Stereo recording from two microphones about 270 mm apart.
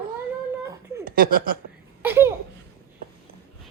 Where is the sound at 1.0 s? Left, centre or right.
Right.